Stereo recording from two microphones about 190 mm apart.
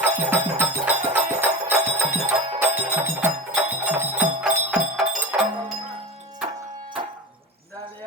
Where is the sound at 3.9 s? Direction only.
10° right (ahead or behind).